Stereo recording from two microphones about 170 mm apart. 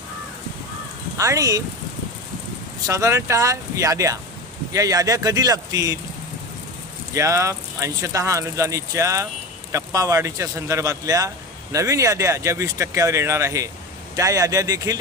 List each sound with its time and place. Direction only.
1.1 s speech: 20° right (ahead or behind)
2.8 s speech: 20° right (ahead or behind)
7.1 s speech: 15° right (ahead or behind)